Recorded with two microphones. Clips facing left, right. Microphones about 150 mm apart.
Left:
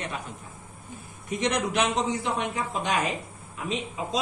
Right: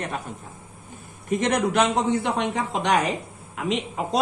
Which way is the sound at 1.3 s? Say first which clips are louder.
Right 5 dB; 50° right (ahead or behind).